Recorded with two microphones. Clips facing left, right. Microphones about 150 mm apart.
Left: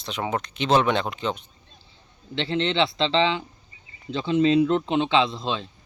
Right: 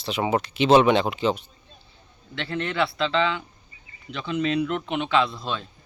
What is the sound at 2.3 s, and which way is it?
Speech, 25° left (ahead or behind).